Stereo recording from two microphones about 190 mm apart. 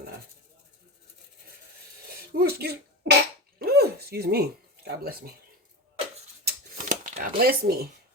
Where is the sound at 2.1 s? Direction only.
55° right (ahead or behind).